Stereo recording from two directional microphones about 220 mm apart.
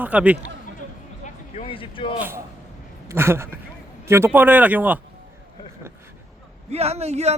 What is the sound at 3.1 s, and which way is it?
Speech, 10° right (ahead or behind).